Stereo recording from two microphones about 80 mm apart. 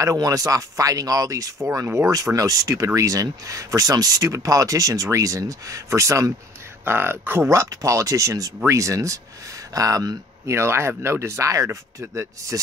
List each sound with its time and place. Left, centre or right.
0.0 s speech: right
6.8 s speech: right